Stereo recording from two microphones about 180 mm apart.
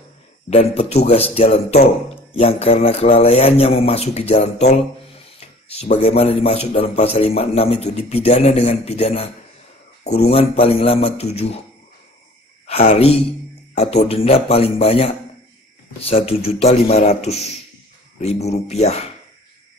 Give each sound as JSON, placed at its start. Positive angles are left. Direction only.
{"t": 0.5, "sound": "a man's voice", "side_deg": 35}
{"t": 12.6, "sound": "a man's voice", "side_deg": 35}